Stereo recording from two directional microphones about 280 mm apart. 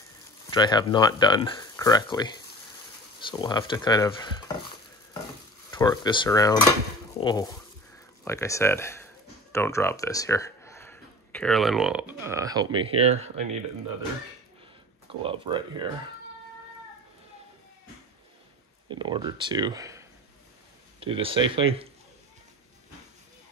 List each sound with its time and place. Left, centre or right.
0.5 s speech: centre
5.7 s speech: centre; by 13.6 s right
15.0 s speech: centre
18.9 s speech: centre